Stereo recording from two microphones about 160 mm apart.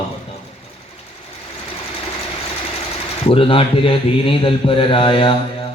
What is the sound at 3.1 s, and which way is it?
A man's voice, 35° left (ahead or behind).